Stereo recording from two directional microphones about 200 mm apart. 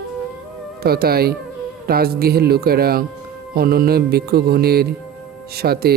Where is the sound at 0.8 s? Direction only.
50° right (ahead or behind).